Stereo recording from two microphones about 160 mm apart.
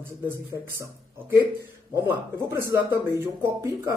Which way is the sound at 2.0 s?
15° right (ahead or behind).